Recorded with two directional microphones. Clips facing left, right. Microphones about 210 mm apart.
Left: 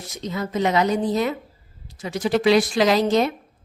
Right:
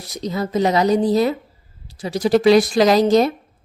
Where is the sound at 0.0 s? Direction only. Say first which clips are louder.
Right 4 dB; 35° right (ahead or behind).